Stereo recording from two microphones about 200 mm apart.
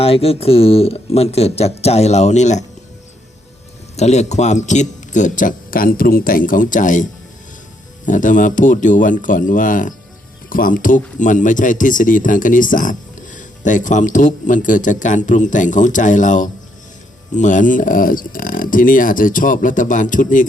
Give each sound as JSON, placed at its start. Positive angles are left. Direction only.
{"t": 0.0, "sound": "speech", "side_deg": 30}
{"t": 3.9, "sound": "speech", "side_deg": 35}